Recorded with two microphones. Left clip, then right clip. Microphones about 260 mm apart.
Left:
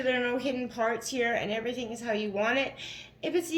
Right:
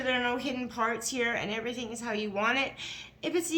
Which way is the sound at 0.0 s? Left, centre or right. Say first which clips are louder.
Left 1 dB; right.